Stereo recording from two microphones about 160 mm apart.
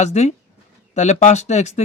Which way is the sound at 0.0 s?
45° left (ahead or behind).